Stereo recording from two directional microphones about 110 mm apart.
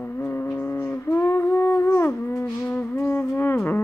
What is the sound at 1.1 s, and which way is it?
Music, 30° left (ahead or behind).